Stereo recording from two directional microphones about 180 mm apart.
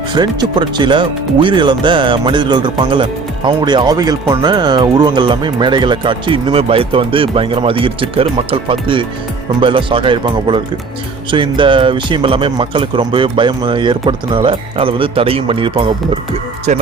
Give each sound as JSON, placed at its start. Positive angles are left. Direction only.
{"t": 0.1, "sound": "speech", "side_deg": -25}
{"t": 16.7, "sound": "speech", "side_deg": -45}